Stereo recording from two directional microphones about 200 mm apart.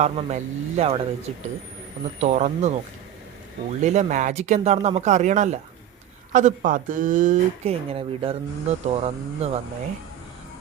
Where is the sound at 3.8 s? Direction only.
35° right (ahead or behind).